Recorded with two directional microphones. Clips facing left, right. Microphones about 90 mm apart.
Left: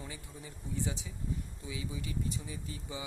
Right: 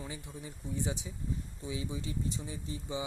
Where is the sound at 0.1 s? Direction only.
20° right (ahead or behind).